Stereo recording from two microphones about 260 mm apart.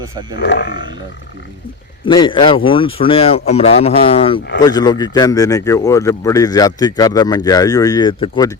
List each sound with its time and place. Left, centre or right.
0.0 s speech: centre
0.3 s speech: left
2.0 s speech: centre